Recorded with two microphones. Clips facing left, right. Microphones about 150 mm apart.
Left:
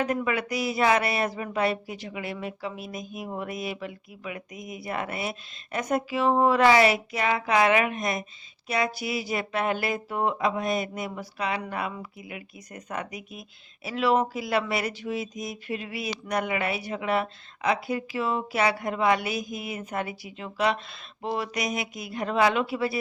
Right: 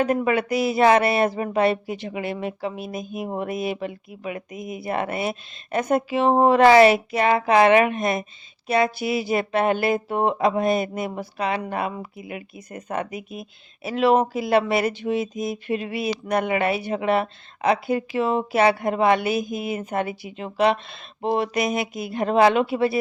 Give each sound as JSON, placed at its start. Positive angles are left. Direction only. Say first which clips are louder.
{"t": 0.0, "sound": "speech", "louder": "right 6 dB", "side_deg": -30}
{"t": 11.2, "sound": "speech", "louder": "right 4 dB", "side_deg": -50}
{"t": 11.5, "sound": "speech", "louder": "right 5 dB", "side_deg": -30}
{"t": 22.2, "sound": "speech", "louder": "right 6 dB", "side_deg": -50}
{"t": 22.4, "sound": "speech", "louder": "right 6 dB", "side_deg": -25}